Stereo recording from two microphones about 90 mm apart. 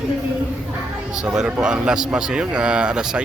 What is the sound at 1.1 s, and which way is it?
Speech, 10° right (ahead or behind).